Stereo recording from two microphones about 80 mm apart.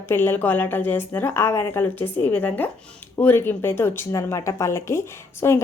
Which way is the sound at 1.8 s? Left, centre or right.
Left.